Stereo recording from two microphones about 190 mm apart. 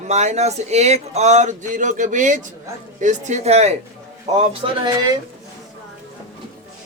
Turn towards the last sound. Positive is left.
turn(degrees=-25)  # may be behind; listen again after turning